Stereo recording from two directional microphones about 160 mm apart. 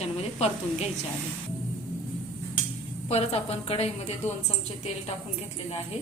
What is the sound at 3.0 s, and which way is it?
A woman's voice, 40° left (ahead or behind).